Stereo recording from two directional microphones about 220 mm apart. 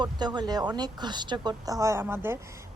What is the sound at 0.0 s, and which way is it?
A woman's voice, 20° right (ahead or behind).